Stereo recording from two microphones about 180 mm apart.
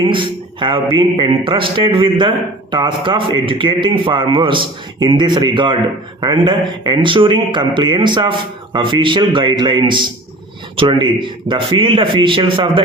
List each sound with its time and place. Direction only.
0.1 s a man's voice: 25° right (ahead or behind)